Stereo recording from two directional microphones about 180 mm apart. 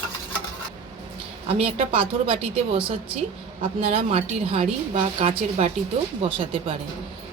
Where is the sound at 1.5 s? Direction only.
35° right (ahead or behind).